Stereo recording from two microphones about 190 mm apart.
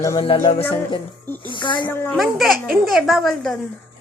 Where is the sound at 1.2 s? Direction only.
10° left (ahead or behind).